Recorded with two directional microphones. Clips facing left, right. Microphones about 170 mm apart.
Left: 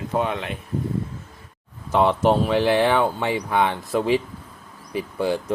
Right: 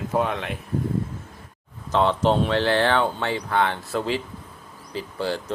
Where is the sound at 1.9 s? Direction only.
10° left (ahead or behind).